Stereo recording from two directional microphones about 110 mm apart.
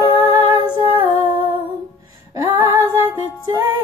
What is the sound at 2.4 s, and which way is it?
Female singing, 30° right (ahead or behind).